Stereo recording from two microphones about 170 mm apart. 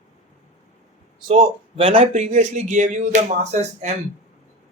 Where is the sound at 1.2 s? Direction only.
30° right (ahead or behind).